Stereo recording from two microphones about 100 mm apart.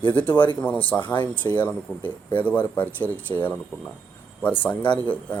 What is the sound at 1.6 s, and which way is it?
Speech, 20° left (ahead or behind).